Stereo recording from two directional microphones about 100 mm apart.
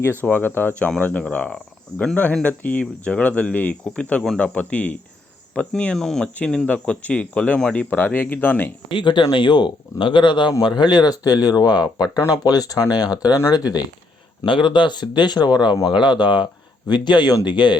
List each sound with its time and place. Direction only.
0.2 s speech: 20° left (ahead or behind)
8.9 s speech: 50° left (ahead or behind)
14.4 s speech: 55° left (ahead or behind)